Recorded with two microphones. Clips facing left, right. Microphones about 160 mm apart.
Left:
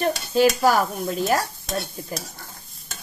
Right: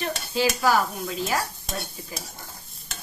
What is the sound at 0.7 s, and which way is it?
Speech, 50° left (ahead or behind).